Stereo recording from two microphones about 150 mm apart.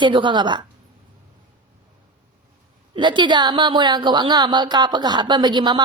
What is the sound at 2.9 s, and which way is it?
A woman's voice, 30° right (ahead or behind).